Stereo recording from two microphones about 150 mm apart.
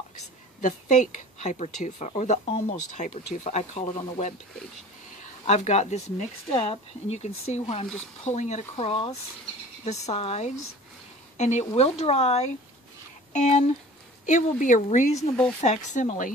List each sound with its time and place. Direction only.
0.6 s speech: 55° left (ahead or behind)
5.5 s speech: 45° left (ahead or behind)